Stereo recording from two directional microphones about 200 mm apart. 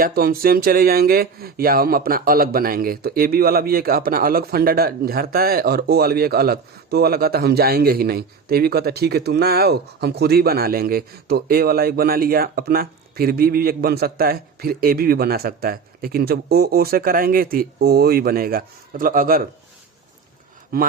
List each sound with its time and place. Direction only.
0.0 s speech: 45° right (ahead or behind)